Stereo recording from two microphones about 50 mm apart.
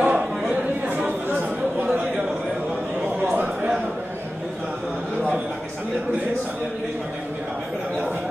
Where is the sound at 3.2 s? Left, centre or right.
Right.